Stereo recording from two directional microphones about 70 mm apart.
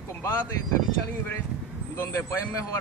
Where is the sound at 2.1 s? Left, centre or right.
Left.